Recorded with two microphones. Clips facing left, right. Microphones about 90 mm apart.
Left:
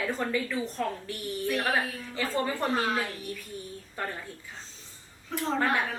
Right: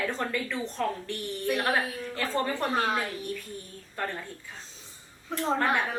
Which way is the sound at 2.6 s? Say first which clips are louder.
Even; 15° right (ahead or behind).